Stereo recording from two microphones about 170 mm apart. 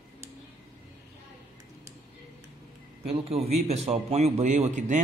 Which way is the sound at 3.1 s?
35° right (ahead or behind).